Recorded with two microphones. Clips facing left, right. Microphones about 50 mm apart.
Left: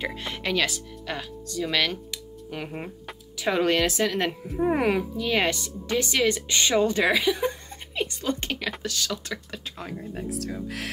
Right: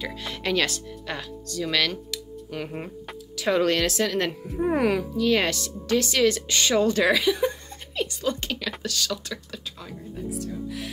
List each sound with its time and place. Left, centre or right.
0.4 s speech: centre
7.4 s a sound: left
9.5 s speech: left
10.1 s speech: left